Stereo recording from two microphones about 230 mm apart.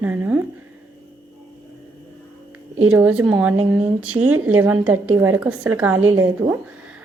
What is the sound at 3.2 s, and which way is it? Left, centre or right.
Speech, centre.